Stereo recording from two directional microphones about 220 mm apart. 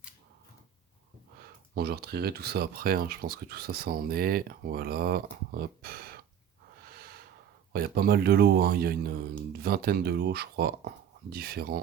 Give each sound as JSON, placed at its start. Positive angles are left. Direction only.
{"t": 1.7, "sound": "speech", "side_deg": -45}
{"t": 6.8, "sound": "snort", "side_deg": -45}
{"t": 7.7, "sound": "speech", "side_deg": -45}